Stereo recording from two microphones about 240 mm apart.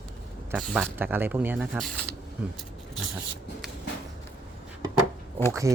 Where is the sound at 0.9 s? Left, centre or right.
Centre.